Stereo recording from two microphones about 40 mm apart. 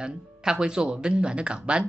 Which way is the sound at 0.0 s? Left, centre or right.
Centre.